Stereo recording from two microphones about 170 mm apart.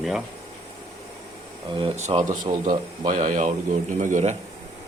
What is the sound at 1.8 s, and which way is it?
Speech, 40° right (ahead or behind).